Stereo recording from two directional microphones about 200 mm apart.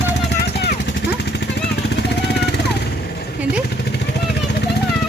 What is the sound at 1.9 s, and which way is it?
Vehicle, 55° left (ahead or behind).